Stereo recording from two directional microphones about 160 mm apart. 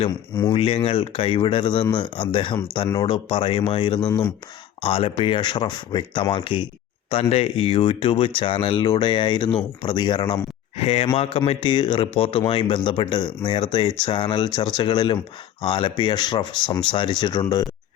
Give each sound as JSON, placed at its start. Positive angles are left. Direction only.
{"t": 0.5, "sound": "speech", "side_deg": 35}